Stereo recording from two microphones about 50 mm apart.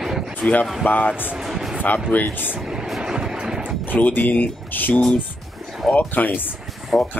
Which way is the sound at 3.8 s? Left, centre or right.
Left.